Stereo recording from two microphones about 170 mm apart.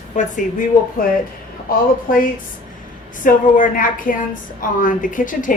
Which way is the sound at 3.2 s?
55° left (ahead or behind).